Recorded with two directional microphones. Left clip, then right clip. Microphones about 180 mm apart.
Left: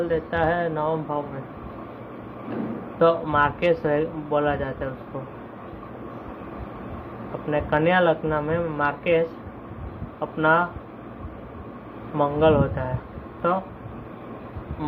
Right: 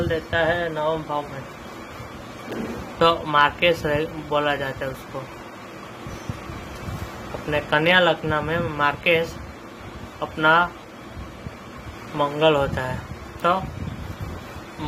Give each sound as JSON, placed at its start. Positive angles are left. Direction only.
{"t": 0.1, "sound": "speech", "side_deg": 0}
{"t": 3.0, "sound": "speech", "side_deg": -20}
{"t": 7.5, "sound": "speech", "side_deg": -20}
{"t": 12.1, "sound": "speech", "side_deg": -10}